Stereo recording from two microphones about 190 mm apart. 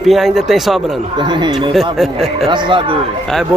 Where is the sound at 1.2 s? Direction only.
25° right (ahead or behind).